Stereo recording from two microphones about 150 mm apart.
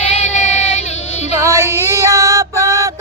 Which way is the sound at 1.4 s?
20° right (ahead or behind).